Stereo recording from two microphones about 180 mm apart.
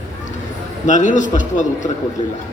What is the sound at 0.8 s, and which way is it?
A man's voice, 45° left (ahead or behind).